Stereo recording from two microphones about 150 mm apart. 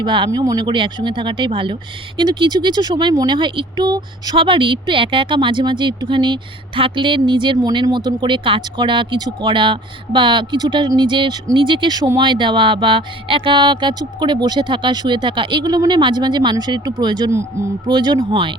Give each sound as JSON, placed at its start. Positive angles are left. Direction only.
{"t": 0.0, "sound": "speech", "side_deg": -30}